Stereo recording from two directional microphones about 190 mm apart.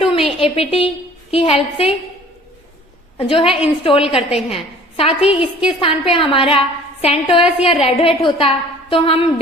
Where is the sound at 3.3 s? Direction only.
30° left (ahead or behind).